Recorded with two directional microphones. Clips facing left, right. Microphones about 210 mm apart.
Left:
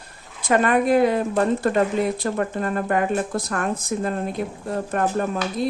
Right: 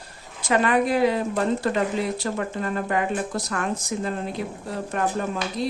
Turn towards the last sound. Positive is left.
turn(degrees=50)  # may be behind; listen again after turning